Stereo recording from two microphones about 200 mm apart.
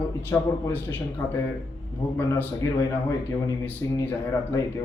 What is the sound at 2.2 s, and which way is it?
Speech, 10° left (ahead or behind).